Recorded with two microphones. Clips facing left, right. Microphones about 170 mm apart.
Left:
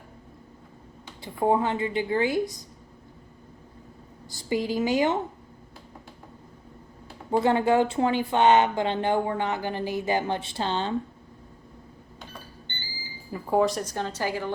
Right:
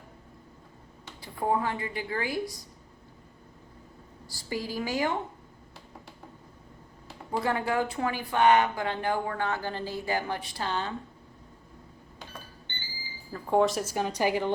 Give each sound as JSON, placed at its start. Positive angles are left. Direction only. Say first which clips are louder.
{"t": 1.0, "sound": "speech", "louder": "left 5 dB", "side_deg": 20}
{"t": 4.3, "sound": "speech", "louder": "left 7 dB", "side_deg": 20}
{"t": 7.3, "sound": "speech", "louder": "left 7 dB", "side_deg": 25}
{"t": 13.3, "sound": "speech", "louder": "left 1 dB", "side_deg": 5}